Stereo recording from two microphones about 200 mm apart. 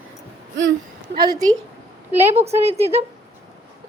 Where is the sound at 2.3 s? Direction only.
30° right (ahead or behind).